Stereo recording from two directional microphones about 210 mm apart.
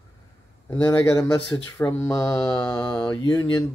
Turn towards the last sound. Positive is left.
turn(degrees=20)  # may be behind; listen again after turning